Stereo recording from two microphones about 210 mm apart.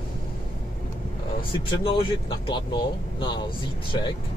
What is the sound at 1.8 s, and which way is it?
Speech, 25° left (ahead or behind).